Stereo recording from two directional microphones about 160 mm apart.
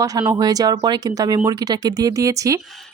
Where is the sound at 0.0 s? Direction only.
25° right (ahead or behind).